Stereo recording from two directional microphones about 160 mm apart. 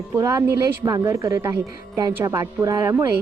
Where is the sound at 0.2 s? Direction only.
20° right (ahead or behind).